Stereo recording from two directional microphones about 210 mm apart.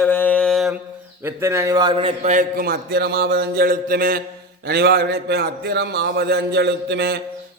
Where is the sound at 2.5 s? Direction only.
45° right (ahead or behind).